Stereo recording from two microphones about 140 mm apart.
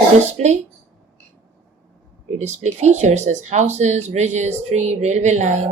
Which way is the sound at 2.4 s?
55° right (ahead or behind).